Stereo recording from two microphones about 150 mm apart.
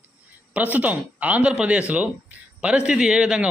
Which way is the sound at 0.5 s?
10° right (ahead or behind).